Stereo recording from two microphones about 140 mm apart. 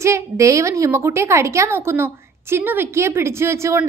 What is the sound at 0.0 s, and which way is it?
A woman's voice, 20° right (ahead or behind).